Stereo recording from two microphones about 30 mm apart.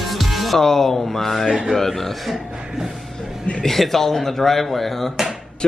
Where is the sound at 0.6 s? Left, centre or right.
Centre.